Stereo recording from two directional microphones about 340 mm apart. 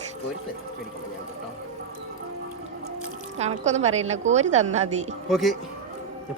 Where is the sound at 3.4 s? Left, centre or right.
Centre.